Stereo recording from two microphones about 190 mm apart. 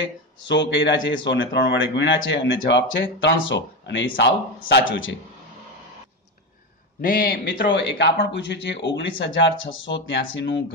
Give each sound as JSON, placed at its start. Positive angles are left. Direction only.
{"t": 0.0, "sound": "speech", "side_deg": 70}
{"t": 7.0, "sound": "speech", "side_deg": 50}